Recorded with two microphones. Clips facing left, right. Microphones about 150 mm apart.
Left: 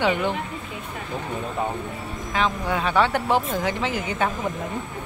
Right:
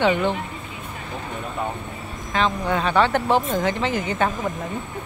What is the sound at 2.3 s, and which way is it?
Speech, 10° left (ahead or behind).